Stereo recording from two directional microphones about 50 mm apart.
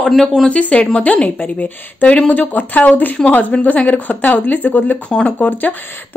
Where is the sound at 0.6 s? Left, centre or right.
Left.